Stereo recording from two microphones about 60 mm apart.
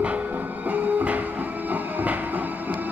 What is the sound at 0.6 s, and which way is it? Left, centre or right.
Music, right.